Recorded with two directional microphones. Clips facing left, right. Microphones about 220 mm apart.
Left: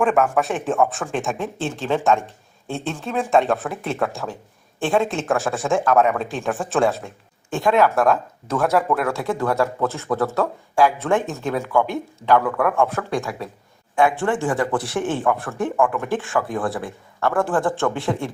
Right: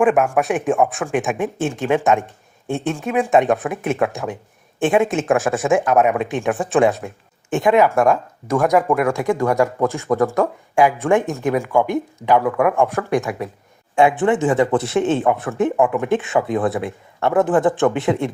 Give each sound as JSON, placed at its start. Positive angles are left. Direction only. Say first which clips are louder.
{"t": 0.0, "sound": "speech", "louder": "right 3 dB", "side_deg": -15}